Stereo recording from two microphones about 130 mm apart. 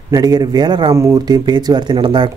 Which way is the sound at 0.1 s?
30° right (ahead or behind).